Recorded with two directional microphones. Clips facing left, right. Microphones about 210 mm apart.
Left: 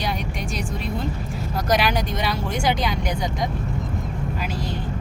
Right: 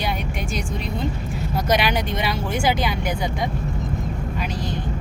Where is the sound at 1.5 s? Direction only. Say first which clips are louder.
Even; centre (ahead or behind).